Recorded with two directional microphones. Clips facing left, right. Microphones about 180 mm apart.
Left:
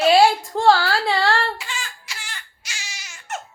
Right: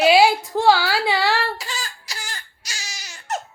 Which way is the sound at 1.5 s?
40° right (ahead or behind).